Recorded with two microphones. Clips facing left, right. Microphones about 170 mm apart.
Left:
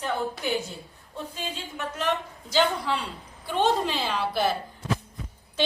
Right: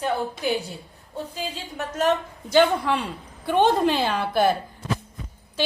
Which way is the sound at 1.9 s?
50° right (ahead or behind).